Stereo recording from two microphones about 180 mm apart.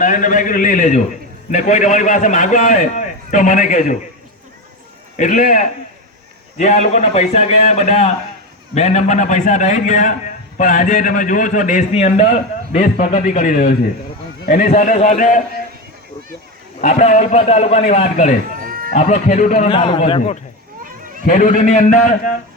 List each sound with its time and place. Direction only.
0.0 s a man's voice: 45° left (ahead or behind)
5.1 s a man's voice: 45° left (ahead or behind)
14.7 s a man's voice: 40° left (ahead or behind)
16.8 s a man's voice: 40° left (ahead or behind)
18.6 s a sound: 55° right (ahead or behind)
18.9 s a man's voice: 40° left (ahead or behind)
21.2 s a man's voice: 45° left (ahead or behind)